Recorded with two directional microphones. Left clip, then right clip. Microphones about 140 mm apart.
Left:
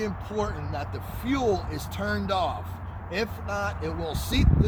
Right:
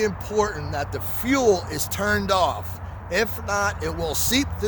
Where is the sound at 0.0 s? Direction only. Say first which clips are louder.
Right 7 dB; 70° right (ahead or behind).